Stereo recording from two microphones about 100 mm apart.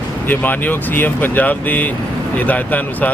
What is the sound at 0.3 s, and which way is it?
Speech, 15° left (ahead or behind).